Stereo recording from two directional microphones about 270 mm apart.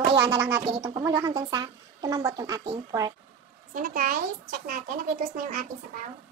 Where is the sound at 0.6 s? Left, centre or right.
Centre.